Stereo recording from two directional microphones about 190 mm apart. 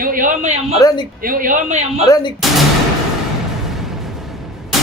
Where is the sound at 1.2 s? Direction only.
45° right (ahead or behind).